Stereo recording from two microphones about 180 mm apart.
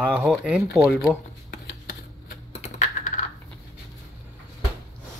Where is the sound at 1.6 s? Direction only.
70° left (ahead or behind).